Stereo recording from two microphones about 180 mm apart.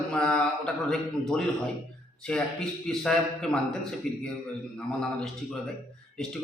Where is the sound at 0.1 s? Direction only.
5° left (ahead or behind).